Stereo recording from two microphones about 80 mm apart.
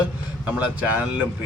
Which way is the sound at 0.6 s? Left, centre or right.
Centre.